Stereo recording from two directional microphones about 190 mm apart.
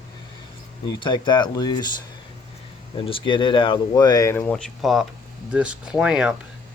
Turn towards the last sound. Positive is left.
turn(degrees=-5)  # may be behind; listen again after turning